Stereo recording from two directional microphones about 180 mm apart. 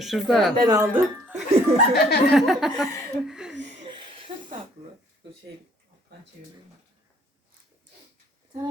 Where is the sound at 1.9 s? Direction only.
60° left (ahead or behind).